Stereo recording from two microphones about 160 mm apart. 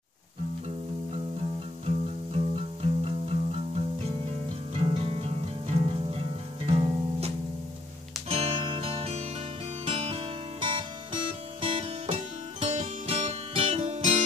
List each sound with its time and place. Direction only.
1.9 s music: 40° right (ahead or behind)
4.7 s music: 35° right (ahead or behind)